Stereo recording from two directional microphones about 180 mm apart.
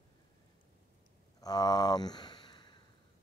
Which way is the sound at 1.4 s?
20° left (ahead or behind).